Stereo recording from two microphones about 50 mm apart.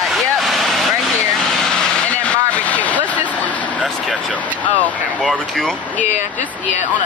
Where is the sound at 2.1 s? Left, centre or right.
Left.